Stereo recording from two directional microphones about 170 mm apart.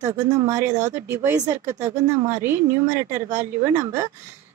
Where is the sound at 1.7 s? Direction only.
45° right (ahead or behind).